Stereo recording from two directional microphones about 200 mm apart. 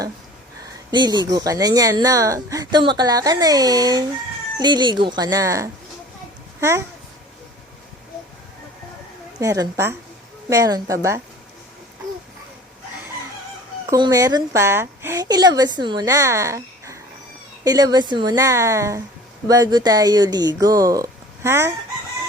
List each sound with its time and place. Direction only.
0.9 s a child's voice: 20° right (ahead or behind)
9.4 s a woman's voice: 15° right (ahead or behind)
13.9 s a woman's voice: 20° right (ahead or behind)